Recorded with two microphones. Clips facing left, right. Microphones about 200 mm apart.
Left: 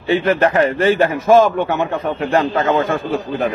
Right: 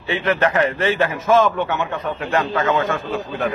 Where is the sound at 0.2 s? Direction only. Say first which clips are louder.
Right 1 dB; 35° left (ahead or behind).